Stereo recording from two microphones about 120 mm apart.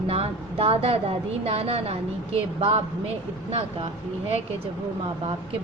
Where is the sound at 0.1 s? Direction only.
55° right (ahead or behind).